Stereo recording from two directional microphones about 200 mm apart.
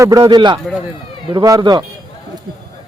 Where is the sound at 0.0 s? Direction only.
20° right (ahead or behind).